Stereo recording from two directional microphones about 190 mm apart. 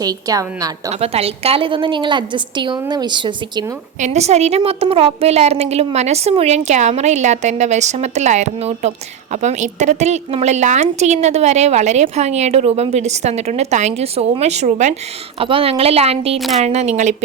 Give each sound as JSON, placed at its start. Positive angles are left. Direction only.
{"t": 0.0, "sound": "a woman's voice", "side_deg": -20}
{"t": 0.9, "sound": "a woman's voice", "side_deg": -35}
{"t": 4.0, "sound": "a woman's voice", "side_deg": -35}